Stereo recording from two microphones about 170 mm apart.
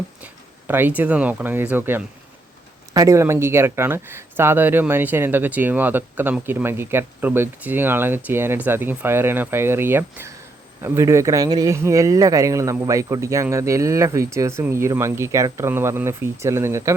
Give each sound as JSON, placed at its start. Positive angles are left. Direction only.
{"t": 0.7, "sound": "speech", "side_deg": -10}